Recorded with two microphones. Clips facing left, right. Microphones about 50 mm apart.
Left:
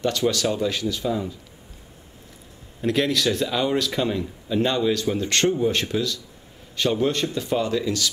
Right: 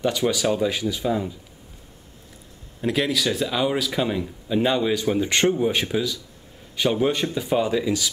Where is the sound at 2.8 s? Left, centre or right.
Centre.